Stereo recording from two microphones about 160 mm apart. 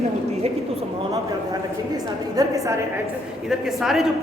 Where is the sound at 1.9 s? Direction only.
20° right (ahead or behind).